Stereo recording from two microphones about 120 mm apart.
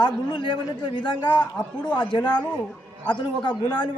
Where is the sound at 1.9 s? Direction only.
40° left (ahead or behind).